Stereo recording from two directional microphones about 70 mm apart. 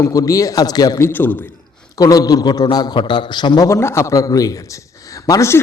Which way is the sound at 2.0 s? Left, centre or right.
Left.